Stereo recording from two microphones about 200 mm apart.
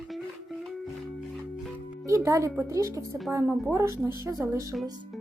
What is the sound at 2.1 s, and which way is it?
Speech, 15° right (ahead or behind).